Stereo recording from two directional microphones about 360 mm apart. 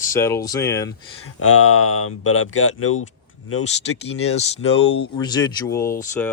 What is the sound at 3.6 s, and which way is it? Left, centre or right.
Speech, centre.